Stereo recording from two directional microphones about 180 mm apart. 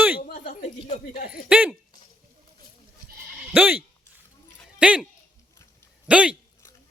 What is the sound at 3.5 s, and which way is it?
Speech, 10° right (ahead or behind).